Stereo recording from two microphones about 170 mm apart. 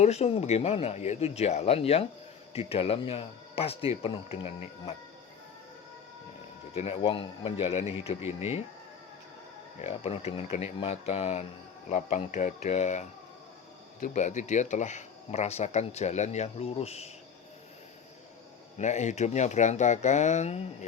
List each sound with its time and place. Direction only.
0.0 s speech: 40° left (ahead or behind)
6.7 s speech: 35° left (ahead or behind)
9.8 s speech: 40° left (ahead or behind)
18.8 s speech: 45° left (ahead or behind)